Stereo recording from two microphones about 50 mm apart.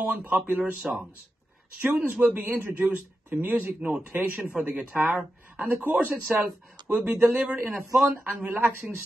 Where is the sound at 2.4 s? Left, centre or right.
Right.